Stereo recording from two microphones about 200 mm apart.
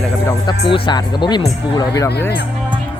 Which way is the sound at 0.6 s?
25° left (ahead or behind).